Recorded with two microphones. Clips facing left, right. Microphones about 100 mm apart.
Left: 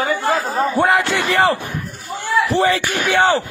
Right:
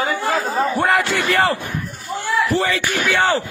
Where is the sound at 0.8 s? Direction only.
15° left (ahead or behind).